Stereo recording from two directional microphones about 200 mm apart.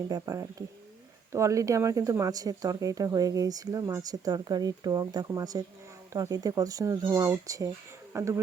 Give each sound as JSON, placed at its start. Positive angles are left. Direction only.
{"t": 0.1, "sound": "speech", "side_deg": -15}